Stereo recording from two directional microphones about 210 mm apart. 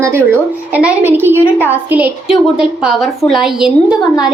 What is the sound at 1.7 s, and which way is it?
A woman's voice, 10° right (ahead or behind).